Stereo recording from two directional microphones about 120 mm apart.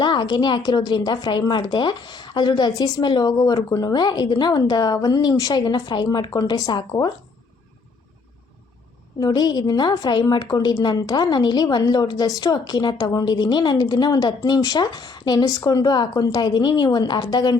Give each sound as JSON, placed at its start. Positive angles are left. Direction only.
{"t": 0.0, "sound": "a woman's voice", "side_deg": 40}
{"t": 9.2, "sound": "a woman's voice", "side_deg": 35}